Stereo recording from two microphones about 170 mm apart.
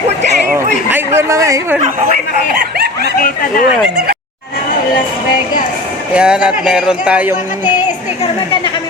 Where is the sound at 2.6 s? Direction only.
65° right (ahead or behind).